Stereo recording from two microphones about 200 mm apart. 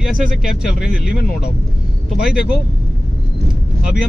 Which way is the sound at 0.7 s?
5° right (ahead or behind).